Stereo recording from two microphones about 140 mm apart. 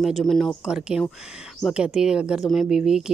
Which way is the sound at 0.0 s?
Centre (ahead or behind).